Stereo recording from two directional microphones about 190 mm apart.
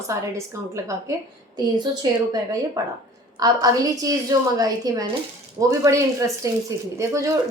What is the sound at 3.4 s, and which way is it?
A woman's voice, 20° right (ahead or behind).